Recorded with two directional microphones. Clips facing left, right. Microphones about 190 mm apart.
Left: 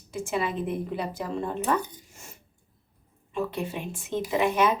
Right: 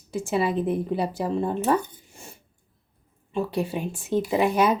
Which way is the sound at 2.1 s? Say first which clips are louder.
Right 4 dB; 30° right (ahead or behind).